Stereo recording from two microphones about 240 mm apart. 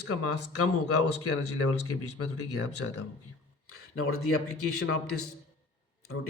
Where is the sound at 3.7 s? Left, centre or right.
Left.